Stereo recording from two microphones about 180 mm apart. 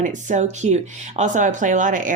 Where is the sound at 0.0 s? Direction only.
45° right (ahead or behind).